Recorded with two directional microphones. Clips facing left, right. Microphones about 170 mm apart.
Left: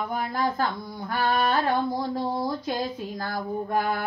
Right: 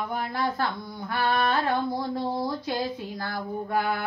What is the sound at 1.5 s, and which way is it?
Mantra, 45° left (ahead or behind).